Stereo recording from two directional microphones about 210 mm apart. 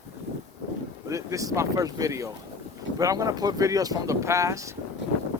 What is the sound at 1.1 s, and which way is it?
Speech, 15° right (ahead or behind).